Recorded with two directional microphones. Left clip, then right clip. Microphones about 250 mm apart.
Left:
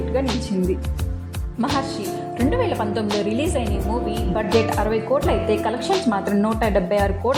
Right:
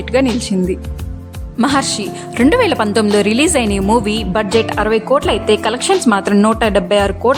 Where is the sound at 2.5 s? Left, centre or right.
Right.